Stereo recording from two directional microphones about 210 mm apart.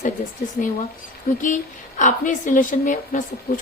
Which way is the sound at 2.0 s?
35° left (ahead or behind).